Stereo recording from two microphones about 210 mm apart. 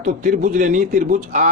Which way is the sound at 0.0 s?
40° right (ahead or behind).